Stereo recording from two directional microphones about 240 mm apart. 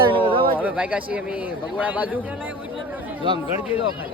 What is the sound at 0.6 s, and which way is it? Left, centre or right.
A man's voice, centre.